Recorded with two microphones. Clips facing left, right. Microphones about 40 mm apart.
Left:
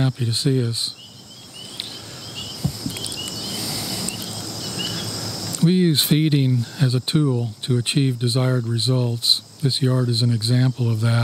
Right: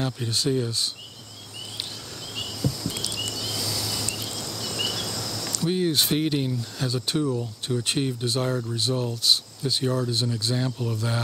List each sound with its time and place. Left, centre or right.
0.0 s speech: left
2.3 s a sound: centre
3.5 s vehicle: centre
4.3 s cricket: centre
5.5 s speech: left